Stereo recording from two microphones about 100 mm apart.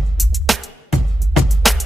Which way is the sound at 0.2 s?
Centre (ahead or behind).